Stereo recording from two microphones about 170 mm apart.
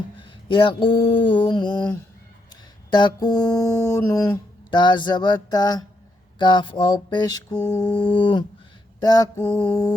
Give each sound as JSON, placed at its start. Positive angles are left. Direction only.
{"t": 0.4, "sound": "speech", "side_deg": 30}